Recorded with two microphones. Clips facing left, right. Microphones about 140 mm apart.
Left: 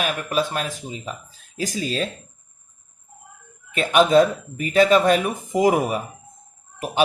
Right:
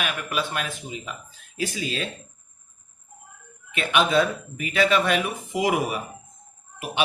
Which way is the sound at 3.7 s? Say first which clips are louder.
Left 5 dB; 40° left (ahead or behind).